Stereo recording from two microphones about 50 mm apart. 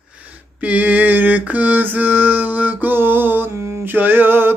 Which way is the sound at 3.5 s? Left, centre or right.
Right.